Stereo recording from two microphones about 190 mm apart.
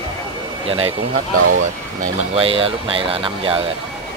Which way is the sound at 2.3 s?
30° right (ahead or behind).